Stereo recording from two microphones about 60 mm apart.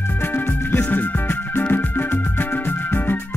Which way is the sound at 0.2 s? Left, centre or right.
Left.